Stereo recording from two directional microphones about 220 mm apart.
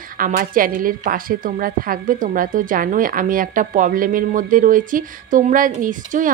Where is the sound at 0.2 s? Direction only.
40° right (ahead or behind).